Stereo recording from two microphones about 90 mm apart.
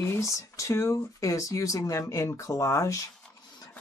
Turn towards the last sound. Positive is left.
turn(degrees=35)  # may be behind; listen again after turning